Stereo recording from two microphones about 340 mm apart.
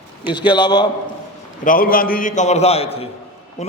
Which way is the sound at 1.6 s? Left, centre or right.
Left.